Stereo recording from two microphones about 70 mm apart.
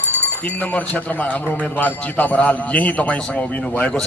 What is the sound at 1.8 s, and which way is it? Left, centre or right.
Jingle bell, left.